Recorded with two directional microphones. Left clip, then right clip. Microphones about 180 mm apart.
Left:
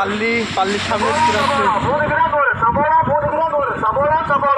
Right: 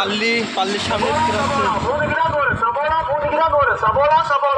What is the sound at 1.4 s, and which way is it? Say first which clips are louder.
Vehicle: left 3 dB; 65° right (ahead or behind).